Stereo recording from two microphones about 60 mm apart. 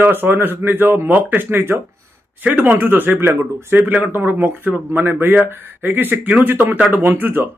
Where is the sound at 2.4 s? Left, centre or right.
Right.